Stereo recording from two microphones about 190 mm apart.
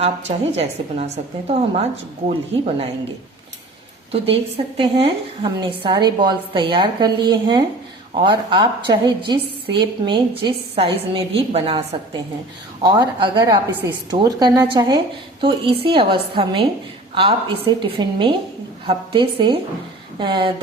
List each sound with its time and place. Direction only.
0.0 s a woman's voice: 35° right (ahead or behind)
4.1 s a woman's voice: 30° right (ahead or behind)
17.7 s a woman's voice: 25° right (ahead or behind)